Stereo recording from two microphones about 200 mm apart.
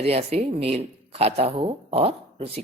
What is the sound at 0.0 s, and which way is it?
Speech, 30° right (ahead or behind).